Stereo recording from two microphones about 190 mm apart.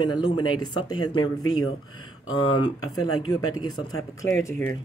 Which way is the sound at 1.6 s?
90° left.